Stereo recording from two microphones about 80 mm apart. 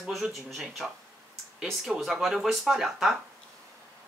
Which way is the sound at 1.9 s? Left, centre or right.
Centre.